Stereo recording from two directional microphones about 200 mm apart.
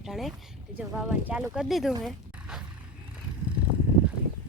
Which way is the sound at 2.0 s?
Centre (ahead or behind).